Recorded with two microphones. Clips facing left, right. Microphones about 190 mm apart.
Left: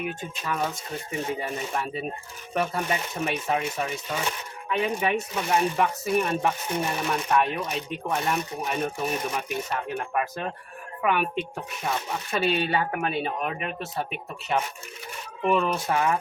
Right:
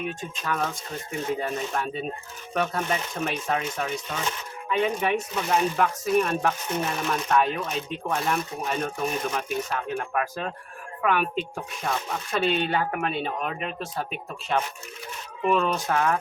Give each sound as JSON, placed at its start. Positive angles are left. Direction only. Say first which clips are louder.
{"t": 0.0, "sound": "speech", "louder": "even", "side_deg": 5}